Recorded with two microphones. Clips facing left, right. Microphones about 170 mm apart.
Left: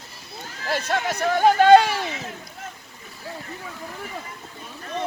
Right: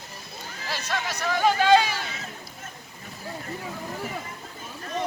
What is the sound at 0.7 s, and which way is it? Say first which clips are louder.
Speech: left 6 dB; 55° left (ahead or behind).